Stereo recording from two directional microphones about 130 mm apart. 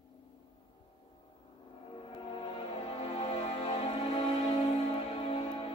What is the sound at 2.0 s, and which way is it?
Music, 45° left (ahead or behind).